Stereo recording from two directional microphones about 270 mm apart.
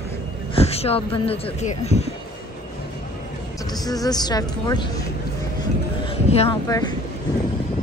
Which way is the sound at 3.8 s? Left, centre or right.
Centre.